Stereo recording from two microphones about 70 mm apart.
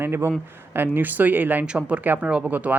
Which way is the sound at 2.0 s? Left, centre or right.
Right.